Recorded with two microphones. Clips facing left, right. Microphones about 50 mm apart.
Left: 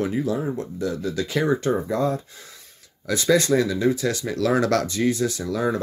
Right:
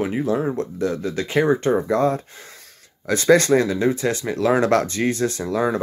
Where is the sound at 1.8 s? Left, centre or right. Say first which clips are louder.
Right 4 dB; right.